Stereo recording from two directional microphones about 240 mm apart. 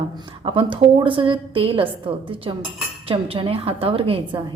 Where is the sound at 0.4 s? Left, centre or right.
Right.